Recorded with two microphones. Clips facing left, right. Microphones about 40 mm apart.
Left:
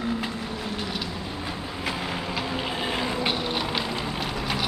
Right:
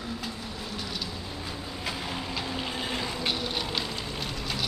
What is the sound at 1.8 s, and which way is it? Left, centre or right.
Vehicle, centre.